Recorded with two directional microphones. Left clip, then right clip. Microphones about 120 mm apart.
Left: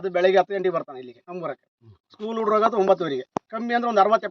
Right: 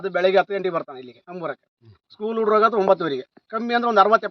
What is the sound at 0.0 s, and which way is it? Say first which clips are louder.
A man's voice: even; 15° left (ahead or behind).